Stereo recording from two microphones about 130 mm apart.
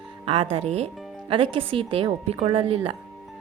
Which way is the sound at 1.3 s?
45° right (ahead or behind).